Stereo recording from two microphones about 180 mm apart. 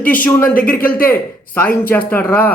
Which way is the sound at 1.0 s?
10° left (ahead or behind).